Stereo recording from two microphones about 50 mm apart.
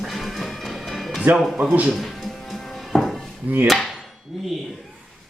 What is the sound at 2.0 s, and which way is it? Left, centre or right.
Music, centre.